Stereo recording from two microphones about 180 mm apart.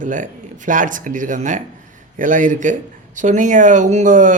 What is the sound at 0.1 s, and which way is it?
A man's voice, 45° right (ahead or behind).